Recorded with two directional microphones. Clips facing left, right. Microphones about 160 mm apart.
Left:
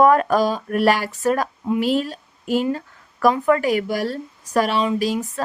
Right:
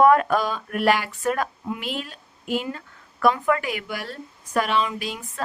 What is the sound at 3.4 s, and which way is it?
Speech, 40° left (ahead or behind).